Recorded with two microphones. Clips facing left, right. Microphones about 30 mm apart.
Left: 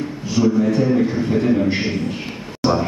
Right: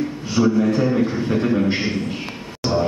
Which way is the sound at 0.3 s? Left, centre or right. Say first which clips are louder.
Left 1 dB; centre.